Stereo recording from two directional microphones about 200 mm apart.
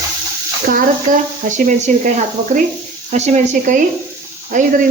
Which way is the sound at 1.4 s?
40° right (ahead or behind).